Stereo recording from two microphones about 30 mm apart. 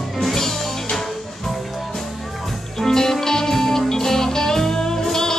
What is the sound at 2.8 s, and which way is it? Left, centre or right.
Music, centre.